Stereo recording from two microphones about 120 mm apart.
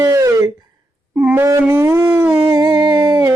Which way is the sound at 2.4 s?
40° right (ahead or behind).